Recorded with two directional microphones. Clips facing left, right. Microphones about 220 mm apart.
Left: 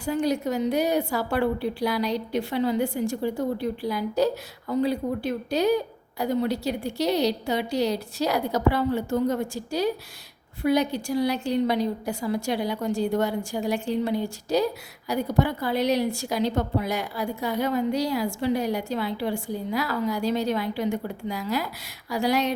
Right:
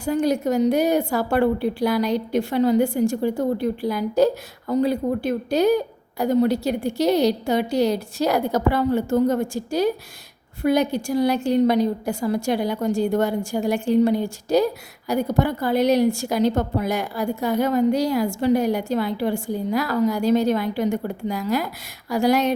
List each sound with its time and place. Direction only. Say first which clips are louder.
0.0 s a woman's voice: right 4 dB; 45° right (ahead or behind)